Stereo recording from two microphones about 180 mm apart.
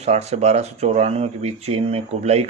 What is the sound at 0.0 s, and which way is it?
Speech, 35° right (ahead or behind).